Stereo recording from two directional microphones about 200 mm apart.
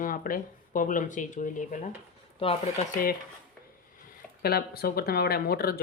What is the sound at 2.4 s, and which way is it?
Speech, 30° left (ahead or behind).